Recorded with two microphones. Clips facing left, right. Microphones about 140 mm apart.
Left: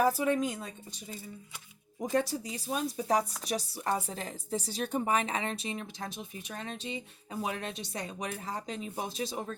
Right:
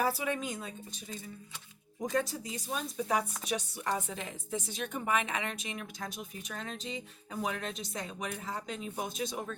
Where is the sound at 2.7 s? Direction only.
40° left (ahead or behind).